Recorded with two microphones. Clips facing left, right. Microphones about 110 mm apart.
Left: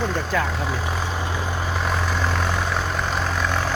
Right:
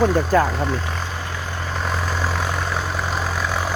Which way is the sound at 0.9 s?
15° left (ahead or behind).